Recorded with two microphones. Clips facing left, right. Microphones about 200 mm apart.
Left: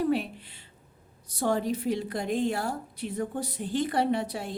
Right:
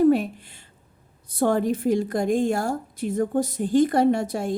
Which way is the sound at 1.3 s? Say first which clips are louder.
Right 6 dB; 55° right (ahead or behind).